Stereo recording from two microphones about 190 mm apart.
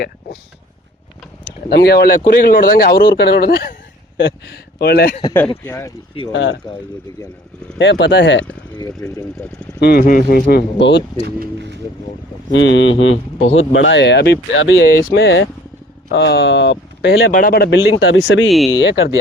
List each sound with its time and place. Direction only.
1.7 s speech: 55° left (ahead or behind)
4.2 s speech: 70° left (ahead or behind)
5.6 s speech: 15° left (ahead or behind)
6.3 s speech: 70° left (ahead or behind)
7.8 s speech: 65° left (ahead or behind)
9.0 s speech: 15° left (ahead or behind)
9.8 s speech: 50° left (ahead or behind)
11.3 s speech: 65° right (ahead or behind)
12.5 s speech: 75° left (ahead or behind)
17.3 s speech: 50° left (ahead or behind); by 18.2 s 70° left (ahead or behind)
18.4 s speech: centre (ahead or behind)
18.7 s speech: 60° left (ahead or behind)